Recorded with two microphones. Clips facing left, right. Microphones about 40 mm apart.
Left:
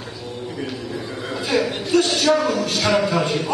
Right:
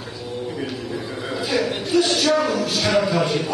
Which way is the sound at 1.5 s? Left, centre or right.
Centre.